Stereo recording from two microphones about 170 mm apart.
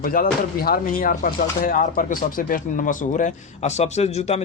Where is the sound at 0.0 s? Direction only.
55° left (ahead or behind).